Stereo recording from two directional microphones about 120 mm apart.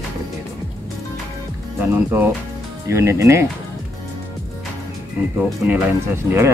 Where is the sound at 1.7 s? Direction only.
15° right (ahead or behind).